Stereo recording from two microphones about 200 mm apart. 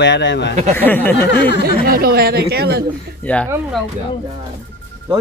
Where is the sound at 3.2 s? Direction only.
10° left (ahead or behind).